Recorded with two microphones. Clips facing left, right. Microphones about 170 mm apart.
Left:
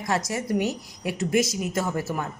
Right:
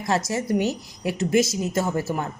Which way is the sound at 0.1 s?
25° right (ahead or behind).